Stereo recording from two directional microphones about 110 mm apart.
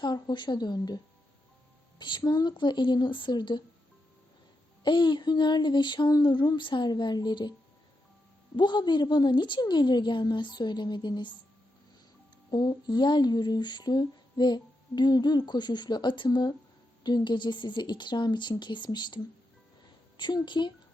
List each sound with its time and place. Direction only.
0.0 s a woman's voice: 45° left (ahead or behind)
2.0 s a woman's voice: 45° left (ahead or behind)
4.8 s a woman's voice: 45° left (ahead or behind)
8.5 s a woman's voice: 45° left (ahead or behind)
12.5 s a woman's voice: 40° left (ahead or behind)